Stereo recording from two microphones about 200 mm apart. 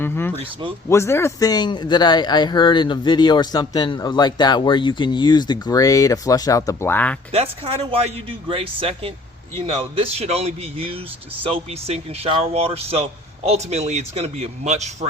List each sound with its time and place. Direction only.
0.0 s speech: 10° left (ahead or behind)
7.3 s a man's voice: 30° right (ahead or behind)